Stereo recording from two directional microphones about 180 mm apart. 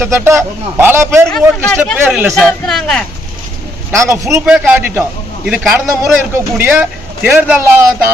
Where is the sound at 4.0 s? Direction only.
15° right (ahead or behind).